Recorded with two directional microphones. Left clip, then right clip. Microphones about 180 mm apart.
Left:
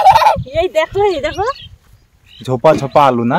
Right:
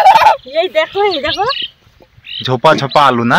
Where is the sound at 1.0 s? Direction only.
20° left (ahead or behind).